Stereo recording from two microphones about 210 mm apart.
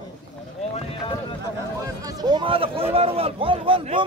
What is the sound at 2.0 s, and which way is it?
A man's voice, 20° right (ahead or behind).